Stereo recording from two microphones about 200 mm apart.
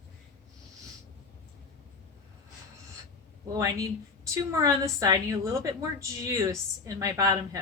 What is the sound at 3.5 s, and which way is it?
A woman's voice, 15° right (ahead or behind).